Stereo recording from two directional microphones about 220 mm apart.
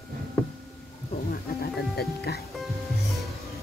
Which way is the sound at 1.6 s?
50° left (ahead or behind).